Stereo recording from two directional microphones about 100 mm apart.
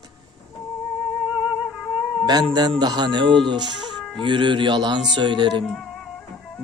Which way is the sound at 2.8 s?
45° right (ahead or behind).